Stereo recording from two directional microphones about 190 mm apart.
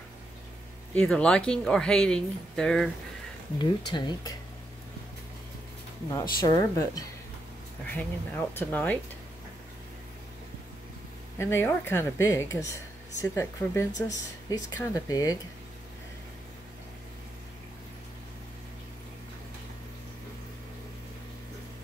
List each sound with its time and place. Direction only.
0.9 s speech: 5° left (ahead or behind)
3.5 s speech: 25° left (ahead or behind)
6.4 s speech: 20° left (ahead or behind)
11.3 s speech: 15° left (ahead or behind)